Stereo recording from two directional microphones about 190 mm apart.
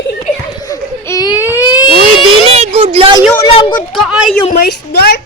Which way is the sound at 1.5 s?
20° left (ahead or behind).